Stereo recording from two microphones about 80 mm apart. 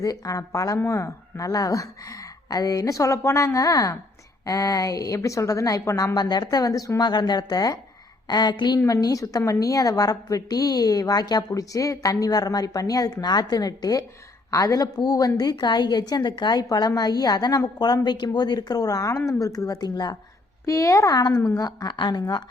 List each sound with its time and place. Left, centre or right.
0.0 s a woman's voice: left
6.1 s a woman's voice: left
7.0 s a woman's voice: left
8.3 s a woman's voice: left
8.9 s a woman's voice: left
20.7 s a woman's voice: left